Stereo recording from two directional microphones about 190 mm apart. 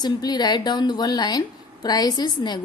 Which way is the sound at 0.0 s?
20° left (ahead or behind).